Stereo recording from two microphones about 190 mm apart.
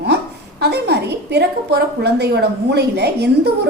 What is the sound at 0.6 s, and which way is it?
A woman's voice, 60° right (ahead or behind).